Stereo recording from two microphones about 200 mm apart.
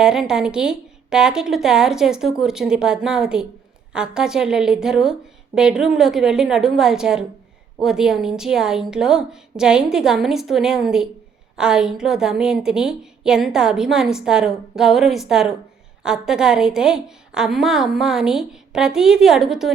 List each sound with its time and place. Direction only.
0.0 s a woman's voice: 5° right (ahead or behind)